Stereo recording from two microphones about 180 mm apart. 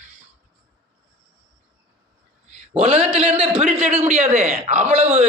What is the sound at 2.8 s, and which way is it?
A man's voice, 35° right (ahead or behind).